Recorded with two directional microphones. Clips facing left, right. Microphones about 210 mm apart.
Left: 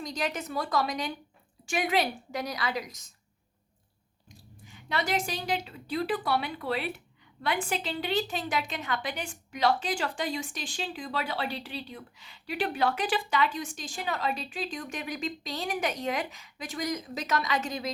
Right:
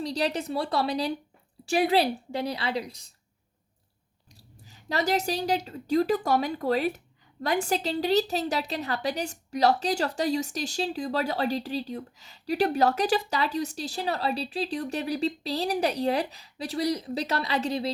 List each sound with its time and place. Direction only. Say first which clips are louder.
0.0 s a woman's voice: right 5 dB; 35° right (ahead or behind)
4.3 s a woman's voice: left 3 dB; 35° right (ahead or behind)